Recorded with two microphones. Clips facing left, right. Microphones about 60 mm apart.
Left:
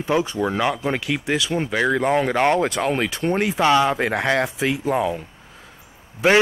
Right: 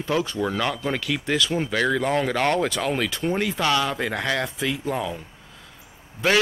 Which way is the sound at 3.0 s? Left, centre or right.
Centre.